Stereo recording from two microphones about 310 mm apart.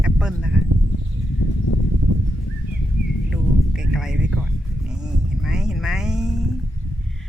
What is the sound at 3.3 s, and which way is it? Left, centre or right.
Music, centre.